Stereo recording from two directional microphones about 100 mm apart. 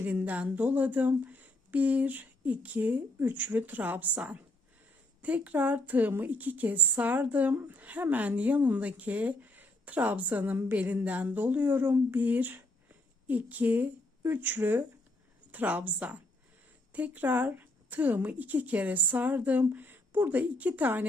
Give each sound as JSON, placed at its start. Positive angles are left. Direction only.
{"t": 0.0, "sound": "speech", "side_deg": -20}